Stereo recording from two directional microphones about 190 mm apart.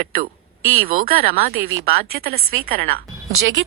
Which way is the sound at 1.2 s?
45° right (ahead or behind).